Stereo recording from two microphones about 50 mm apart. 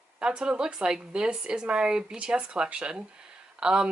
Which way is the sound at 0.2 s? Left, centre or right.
Centre.